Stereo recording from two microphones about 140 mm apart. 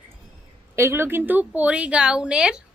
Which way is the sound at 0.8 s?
15° right (ahead or behind).